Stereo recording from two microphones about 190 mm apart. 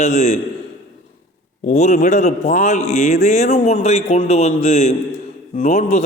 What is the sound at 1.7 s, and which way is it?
A man's voice, 40° left (ahead or behind).